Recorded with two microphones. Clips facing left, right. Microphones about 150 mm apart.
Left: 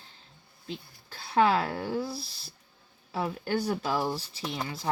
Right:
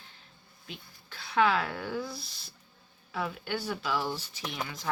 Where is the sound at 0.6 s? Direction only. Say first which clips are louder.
Left 7 dB; 35° left (ahead or behind).